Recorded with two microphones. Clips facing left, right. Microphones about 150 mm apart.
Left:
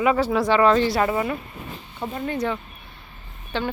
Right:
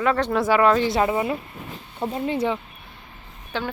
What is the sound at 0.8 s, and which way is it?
Speech, 20° right (ahead or behind).